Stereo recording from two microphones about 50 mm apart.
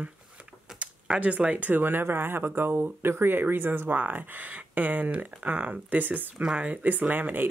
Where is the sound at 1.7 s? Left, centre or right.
Right.